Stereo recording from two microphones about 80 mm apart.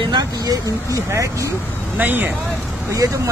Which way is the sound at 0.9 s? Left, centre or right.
Right.